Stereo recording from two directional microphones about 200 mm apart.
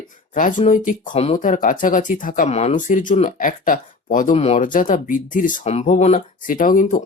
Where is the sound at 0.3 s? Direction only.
40° left (ahead or behind).